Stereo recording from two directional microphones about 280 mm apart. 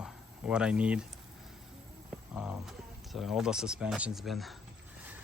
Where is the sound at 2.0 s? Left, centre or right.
Centre.